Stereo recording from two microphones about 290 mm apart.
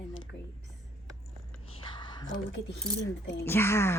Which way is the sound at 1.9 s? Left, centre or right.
Centre.